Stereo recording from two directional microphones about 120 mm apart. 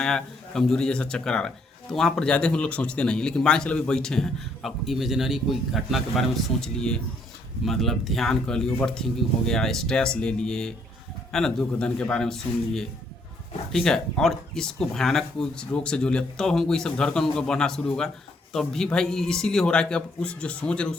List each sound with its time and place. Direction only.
0.0 s speech: 5° left (ahead or behind)